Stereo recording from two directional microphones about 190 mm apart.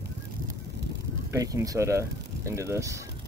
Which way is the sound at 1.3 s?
20° right (ahead or behind).